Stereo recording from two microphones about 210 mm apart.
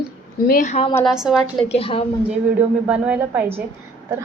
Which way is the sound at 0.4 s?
40° left (ahead or behind).